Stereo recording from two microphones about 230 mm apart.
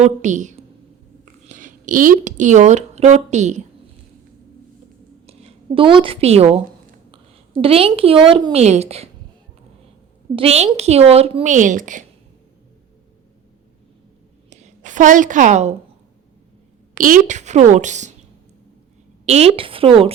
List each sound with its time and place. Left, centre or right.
0.0 s a woman's voice: right
5.2 s a woman's voice: right
7.6 s a woman's voice: right
10.3 s a woman's voice: right
14.5 s a woman's voice: right
16.9 s a woman's voice: right
19.2 s a woman's voice: right